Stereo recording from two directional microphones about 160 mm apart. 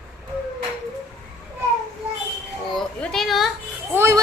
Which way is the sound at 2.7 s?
Centre (ahead or behind).